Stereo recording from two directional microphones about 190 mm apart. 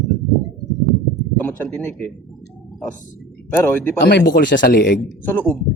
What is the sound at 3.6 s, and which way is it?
Speech, 10° left (ahead or behind).